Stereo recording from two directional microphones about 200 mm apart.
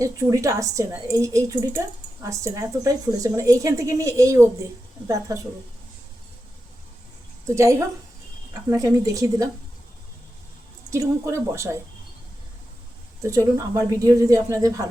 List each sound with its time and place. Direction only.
0.0 s a woman's voice: 15° right (ahead or behind)
7.4 s a woman's voice: 15° right (ahead or behind)
10.9 s a woman's voice: 15° right (ahead or behind)
13.2 s a woman's voice: 15° right (ahead or behind)